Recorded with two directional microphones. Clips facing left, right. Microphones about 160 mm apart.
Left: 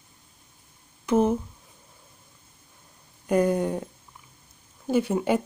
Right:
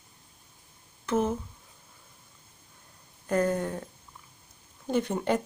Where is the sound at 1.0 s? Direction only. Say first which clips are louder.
Left 6 dB; 15° left (ahead or behind).